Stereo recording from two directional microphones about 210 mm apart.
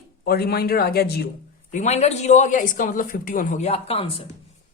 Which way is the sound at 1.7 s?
35° left (ahead or behind).